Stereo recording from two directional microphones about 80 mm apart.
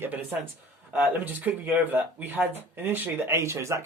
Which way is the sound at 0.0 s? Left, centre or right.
Right.